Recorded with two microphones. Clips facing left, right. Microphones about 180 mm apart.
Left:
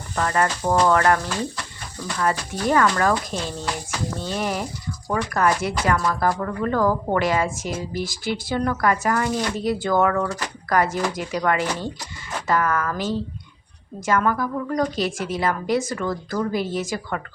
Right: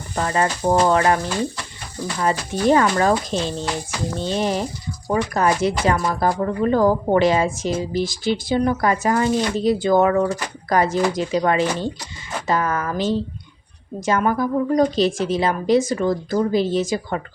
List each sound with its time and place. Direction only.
0.2 s speech: 25° right (ahead or behind)